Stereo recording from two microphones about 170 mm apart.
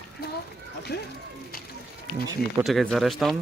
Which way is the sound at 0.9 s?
70° left (ahead or behind).